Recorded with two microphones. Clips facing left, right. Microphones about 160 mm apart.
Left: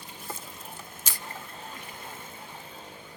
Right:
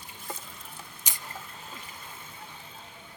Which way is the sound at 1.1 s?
15° right (ahead or behind).